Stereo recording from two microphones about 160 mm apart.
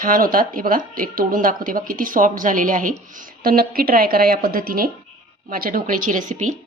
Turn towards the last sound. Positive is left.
turn(degrees=-50)  # may be behind; listen again after turning